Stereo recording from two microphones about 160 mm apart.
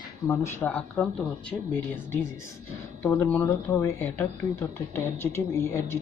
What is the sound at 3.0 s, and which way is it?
Speech, 15° left (ahead or behind).